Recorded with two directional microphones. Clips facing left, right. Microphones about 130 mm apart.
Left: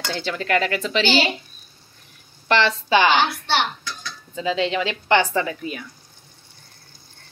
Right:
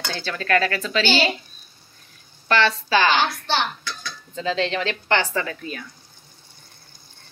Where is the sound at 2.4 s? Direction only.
20° left (ahead or behind).